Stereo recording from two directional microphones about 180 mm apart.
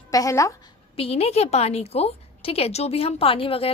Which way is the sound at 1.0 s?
35° left (ahead or behind).